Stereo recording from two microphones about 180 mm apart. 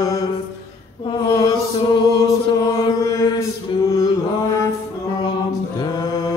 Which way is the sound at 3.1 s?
20° left (ahead or behind).